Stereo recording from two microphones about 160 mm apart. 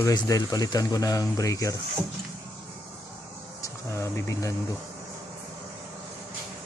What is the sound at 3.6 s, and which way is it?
Speech, 20° left (ahead or behind).